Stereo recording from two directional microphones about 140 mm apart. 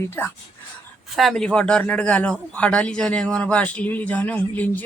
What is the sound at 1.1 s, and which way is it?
A man's voice, centre (ahead or behind).